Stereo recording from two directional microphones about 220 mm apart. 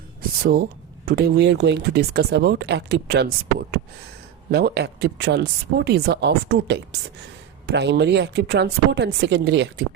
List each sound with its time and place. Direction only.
0.4 s speech: 45° right (ahead or behind)